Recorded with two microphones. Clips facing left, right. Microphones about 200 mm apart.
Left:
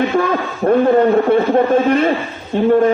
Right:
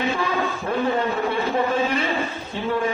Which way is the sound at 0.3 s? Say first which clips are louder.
Left 9 dB; 50° left (ahead or behind).